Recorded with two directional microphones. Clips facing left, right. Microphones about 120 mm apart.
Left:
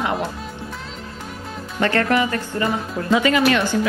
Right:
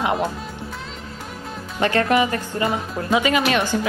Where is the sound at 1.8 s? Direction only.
20° right (ahead or behind).